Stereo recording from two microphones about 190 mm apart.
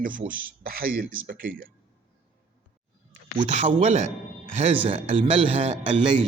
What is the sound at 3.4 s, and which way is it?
Speech, 35° right (ahead or behind).